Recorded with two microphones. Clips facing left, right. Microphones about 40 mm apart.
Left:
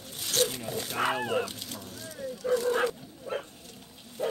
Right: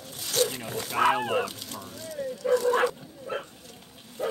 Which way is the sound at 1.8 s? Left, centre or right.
Centre.